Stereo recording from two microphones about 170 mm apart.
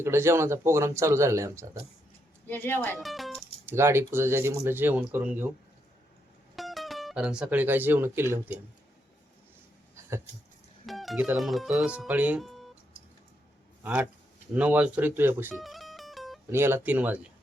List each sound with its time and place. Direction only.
0.0 s speech: 15° right (ahead or behind)
2.5 s a woman's voice: 10° left (ahead or behind)
3.0 s music: centre (ahead or behind)
3.7 s speech: 15° right (ahead or behind)
6.6 s speech: centre (ahead or behind)
9.9 s a sound: 15° right (ahead or behind)
10.8 s speech: centre (ahead or behind)
13.8 s speech: 10° right (ahead or behind)
15.6 s music: centre (ahead or behind)
16.5 s speech: 15° right (ahead or behind)